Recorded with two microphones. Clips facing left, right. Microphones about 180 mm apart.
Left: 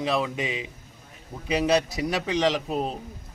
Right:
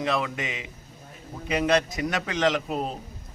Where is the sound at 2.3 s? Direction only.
Centre (ahead or behind).